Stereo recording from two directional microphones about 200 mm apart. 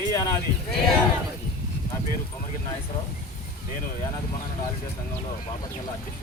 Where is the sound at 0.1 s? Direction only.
15° left (ahead or behind).